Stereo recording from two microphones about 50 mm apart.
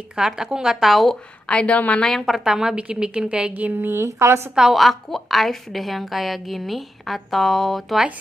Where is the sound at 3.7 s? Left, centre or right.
Right.